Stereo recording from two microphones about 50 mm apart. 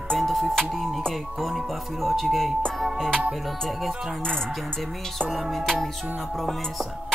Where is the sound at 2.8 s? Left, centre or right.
Centre.